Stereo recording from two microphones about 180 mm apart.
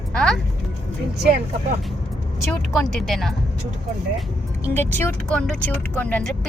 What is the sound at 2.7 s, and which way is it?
Speech, centre (ahead or behind).